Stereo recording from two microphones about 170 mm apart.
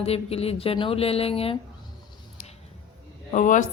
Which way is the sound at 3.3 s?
50° left (ahead or behind).